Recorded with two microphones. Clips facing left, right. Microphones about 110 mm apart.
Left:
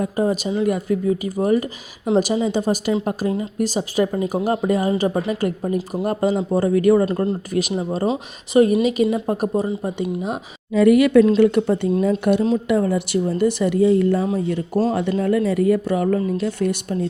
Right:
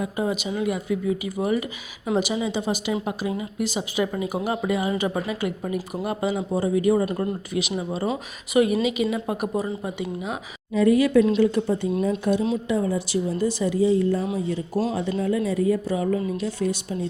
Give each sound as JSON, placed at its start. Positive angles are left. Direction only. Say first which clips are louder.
{"t": 0.0, "sound": "speech", "louder": "left 5 dB", "side_deg": 45}
{"t": 7.5, "sound": "speech", "louder": "left 5 dB", "side_deg": 45}
{"t": 10.8, "sound": "speech", "louder": "left 5 dB", "side_deg": 70}